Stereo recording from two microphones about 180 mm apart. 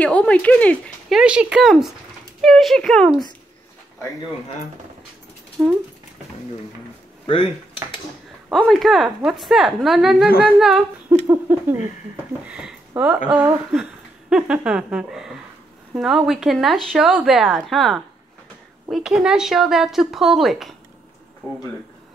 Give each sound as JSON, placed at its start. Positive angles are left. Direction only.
{"t": 0.0, "sound": "speech", "side_deg": 5}
{"t": 5.6, "sound": "speech", "side_deg": -5}
{"t": 7.2, "sound": "speech", "side_deg": 30}
{"t": 8.5, "sound": "speech", "side_deg": 0}
{"t": 11.2, "sound": "a sound", "side_deg": -10}
{"t": 12.4, "sound": "speech", "side_deg": -5}
{"t": 13.3, "sound": "a sound", "side_deg": -10}
{"t": 14.3, "sound": "speech", "side_deg": -5}